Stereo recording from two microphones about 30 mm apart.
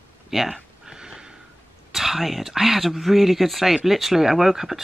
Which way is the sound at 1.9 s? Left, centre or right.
Centre.